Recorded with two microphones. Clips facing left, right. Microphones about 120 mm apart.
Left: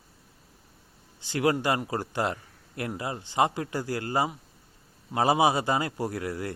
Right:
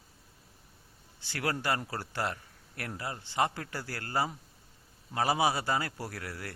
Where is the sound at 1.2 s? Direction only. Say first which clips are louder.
Left 9 dB; 20° left (ahead or behind).